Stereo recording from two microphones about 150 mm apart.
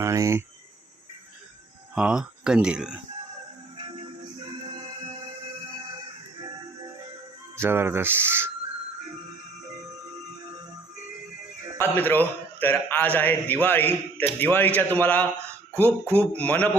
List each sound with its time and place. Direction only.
0.0 s speech: 20° right (ahead or behind)
2.0 s speech: 5° right (ahead or behind)
7.5 s speech: 15° right (ahead or behind)
11.8 s a man's voice: 15° left (ahead or behind)
15.7 s speech: 15° right (ahead or behind)
16.1 s a man's voice: 10° left (ahead or behind)